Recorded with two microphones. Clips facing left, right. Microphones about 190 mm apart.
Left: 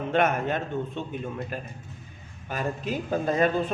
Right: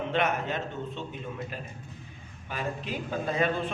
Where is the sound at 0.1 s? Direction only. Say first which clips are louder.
Left 6 dB; 50° left (ahead or behind).